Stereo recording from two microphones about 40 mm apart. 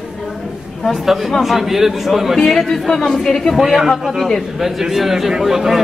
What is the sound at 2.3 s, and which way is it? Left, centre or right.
Speech, centre.